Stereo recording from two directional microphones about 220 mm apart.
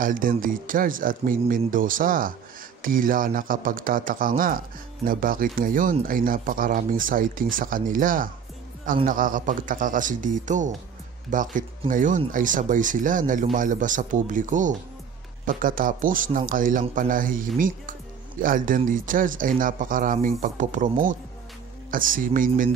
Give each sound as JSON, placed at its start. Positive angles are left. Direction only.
{"t": 0.0, "sound": "speech", "side_deg": -40}